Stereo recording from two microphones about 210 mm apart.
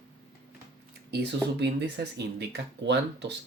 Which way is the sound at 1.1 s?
55° right (ahead or behind).